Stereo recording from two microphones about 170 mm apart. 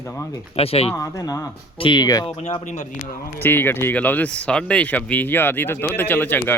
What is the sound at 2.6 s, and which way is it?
Speech, 45° left (ahead or behind).